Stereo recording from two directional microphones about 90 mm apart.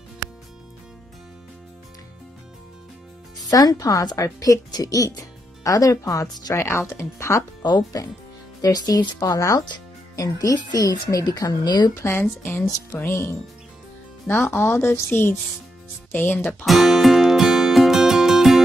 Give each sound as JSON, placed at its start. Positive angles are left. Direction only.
{"t": 3.3, "sound": "speech", "side_deg": 45}
{"t": 6.5, "sound": "speech", "side_deg": 30}
{"t": 7.6, "sound": "speech", "side_deg": 45}
{"t": 11.9, "sound": "speech", "side_deg": 30}
{"t": 14.5, "sound": "speech", "side_deg": 25}
{"t": 16.6, "sound": "music", "side_deg": 0}